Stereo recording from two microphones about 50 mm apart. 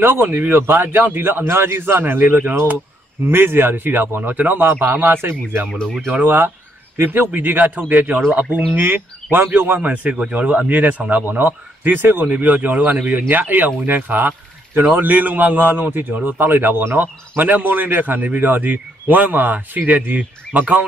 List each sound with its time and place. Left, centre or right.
0.0 s speech: right
5.7 s speech: centre
6.2 s a man's voice: right
9.8 s a man's voice: right
12.3 s a man's voice: right
12.9 s speech: right
13.3 s a man's voice: right